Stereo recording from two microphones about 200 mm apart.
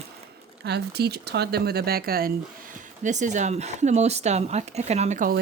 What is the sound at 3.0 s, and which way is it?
Speech, 35° right (ahead or behind).